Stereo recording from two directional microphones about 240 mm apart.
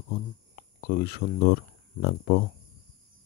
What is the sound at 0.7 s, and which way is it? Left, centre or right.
Speech, left.